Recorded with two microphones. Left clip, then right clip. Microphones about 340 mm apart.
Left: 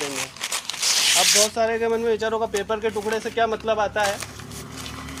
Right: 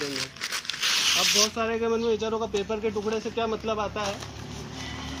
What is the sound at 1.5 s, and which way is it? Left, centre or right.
Speech, centre.